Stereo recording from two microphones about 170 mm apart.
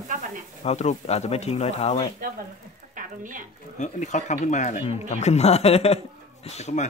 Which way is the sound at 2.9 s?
50° right (ahead or behind).